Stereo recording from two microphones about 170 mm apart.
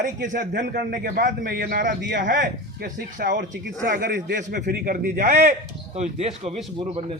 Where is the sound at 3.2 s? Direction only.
65° right (ahead or behind).